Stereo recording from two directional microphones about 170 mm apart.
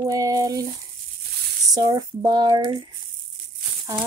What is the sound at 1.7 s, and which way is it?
Speech, 25° right (ahead or behind).